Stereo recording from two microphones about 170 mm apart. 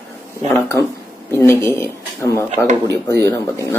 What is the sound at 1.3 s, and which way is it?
Speech, 15° left (ahead or behind).